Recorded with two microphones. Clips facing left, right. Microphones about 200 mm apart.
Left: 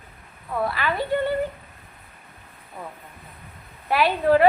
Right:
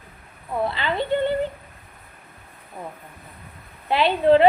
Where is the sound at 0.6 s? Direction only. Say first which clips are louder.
Right 1 dB; 25° right (ahead or behind).